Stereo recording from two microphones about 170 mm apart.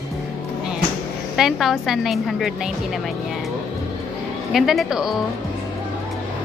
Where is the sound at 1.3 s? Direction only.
Centre (ahead or behind).